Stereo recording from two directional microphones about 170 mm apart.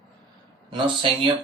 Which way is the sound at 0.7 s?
30° right (ahead or behind).